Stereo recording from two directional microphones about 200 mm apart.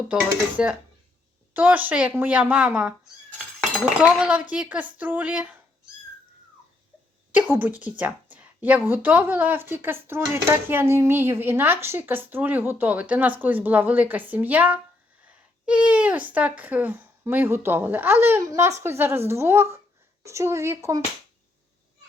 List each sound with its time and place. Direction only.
0.1 s a woman's voice: 10° right (ahead or behind)
7.3 s a woman's voice: 10° right (ahead or behind)